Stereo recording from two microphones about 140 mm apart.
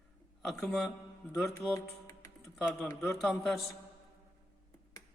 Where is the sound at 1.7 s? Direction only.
20° left (ahead or behind).